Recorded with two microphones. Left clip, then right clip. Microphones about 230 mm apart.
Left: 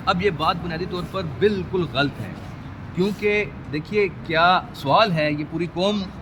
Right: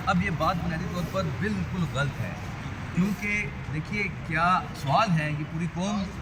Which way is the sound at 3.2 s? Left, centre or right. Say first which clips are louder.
Left 8 dB; left.